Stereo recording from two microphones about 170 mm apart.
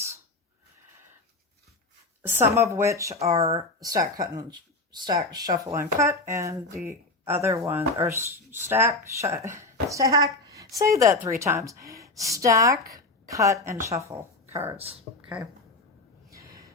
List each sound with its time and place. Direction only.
2.4 s speech: 15° right (ahead or behind)
14.8 s speech: 35° right (ahead or behind)